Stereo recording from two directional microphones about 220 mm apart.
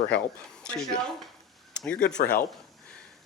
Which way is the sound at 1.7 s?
5° left (ahead or behind).